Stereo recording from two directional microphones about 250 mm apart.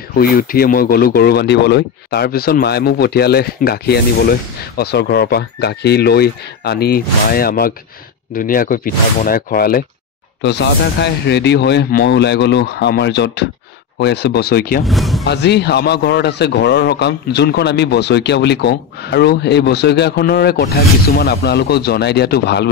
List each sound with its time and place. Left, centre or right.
0.2 s speech: left
14.9 s speech: centre
15.2 s speech: left